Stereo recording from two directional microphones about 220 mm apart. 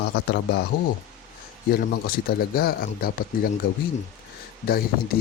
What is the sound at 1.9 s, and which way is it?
Speech, 45° left (ahead or behind).